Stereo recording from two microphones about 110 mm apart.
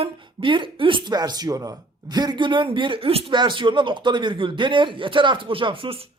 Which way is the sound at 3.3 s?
45° right (ahead or behind).